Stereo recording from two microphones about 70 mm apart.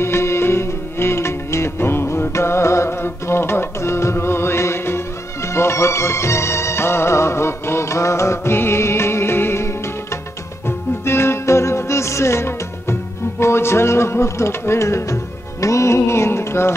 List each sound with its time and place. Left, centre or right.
0.0 s music: left
11.1 s music: left